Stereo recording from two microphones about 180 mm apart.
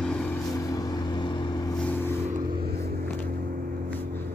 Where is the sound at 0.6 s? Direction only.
20° left (ahead or behind).